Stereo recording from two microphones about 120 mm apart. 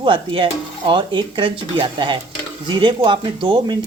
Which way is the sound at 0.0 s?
45° right (ahead or behind).